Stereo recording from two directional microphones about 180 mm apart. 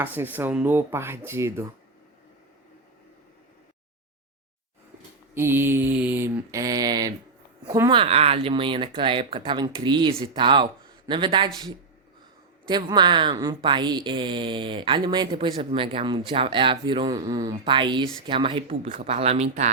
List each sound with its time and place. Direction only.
0.0 s mantra: 10° right (ahead or behind)
5.3 s mantra: 10° right (ahead or behind)
7.7 s speech: 25° right (ahead or behind)
12.6 s speech: 25° right (ahead or behind)